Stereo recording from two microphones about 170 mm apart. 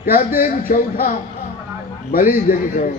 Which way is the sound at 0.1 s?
60° left (ahead or behind).